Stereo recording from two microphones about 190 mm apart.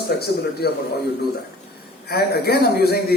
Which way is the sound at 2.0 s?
55° left (ahead or behind).